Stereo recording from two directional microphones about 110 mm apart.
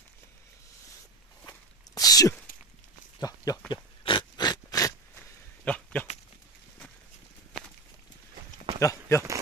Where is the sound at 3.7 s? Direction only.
45° left (ahead or behind).